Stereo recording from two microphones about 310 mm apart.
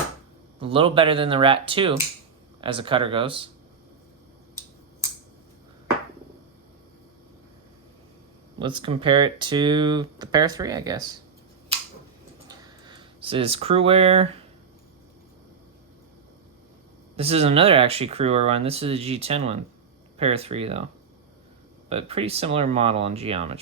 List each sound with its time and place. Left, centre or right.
0.6 s speech: centre
8.5 s speech: centre
12.5 s a sound: centre
17.2 s speech: centre
21.8 s speech: centre